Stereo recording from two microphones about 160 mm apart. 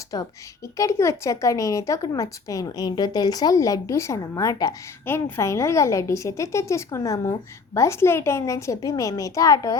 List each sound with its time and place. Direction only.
0.1 s a woman's voice: 25° left (ahead or behind)